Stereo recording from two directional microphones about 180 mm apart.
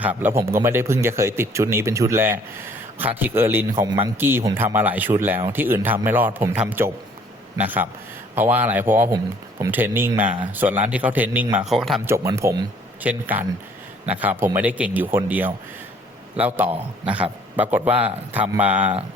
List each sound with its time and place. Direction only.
0.0 s speech: 10° right (ahead or behind)
12.0 s speech: 15° right (ahead or behind)